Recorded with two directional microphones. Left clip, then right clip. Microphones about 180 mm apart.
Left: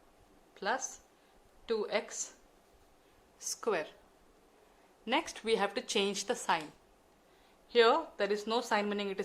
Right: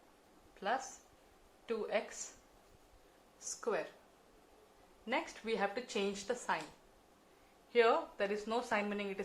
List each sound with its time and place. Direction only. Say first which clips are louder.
0.5 s a woman's voice: left 3 dB; 40° left (ahead or behind)
3.4 s a woman's voice: left 4 dB; 45° left (ahead or behind)
5.0 s a woman's voice: left 6 dB; 50° left (ahead or behind)
7.7 s speech: left 4 dB; 40° left (ahead or behind)